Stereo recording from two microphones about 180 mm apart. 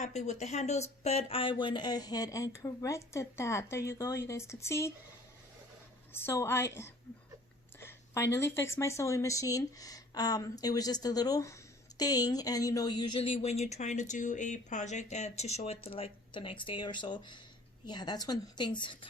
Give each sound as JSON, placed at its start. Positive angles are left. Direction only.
{"t": 0.0, "sound": "speech", "side_deg": 40}
{"t": 6.1, "sound": "a woman's voice", "side_deg": 15}